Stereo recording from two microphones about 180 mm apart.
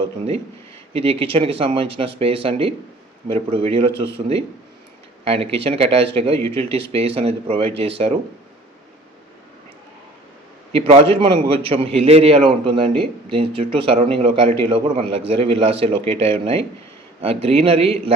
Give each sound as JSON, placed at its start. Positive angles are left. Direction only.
{"t": 0.9, "sound": "speech", "side_deg": -30}
{"t": 10.7, "sound": "speech", "side_deg": -35}